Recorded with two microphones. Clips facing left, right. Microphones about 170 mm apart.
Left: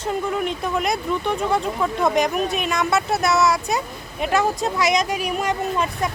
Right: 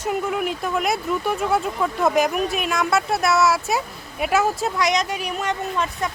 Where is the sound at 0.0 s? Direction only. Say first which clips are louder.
Even; 10° right (ahead or behind).